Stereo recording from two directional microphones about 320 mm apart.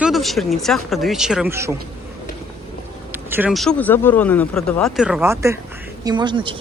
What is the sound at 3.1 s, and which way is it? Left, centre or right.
Speech, centre.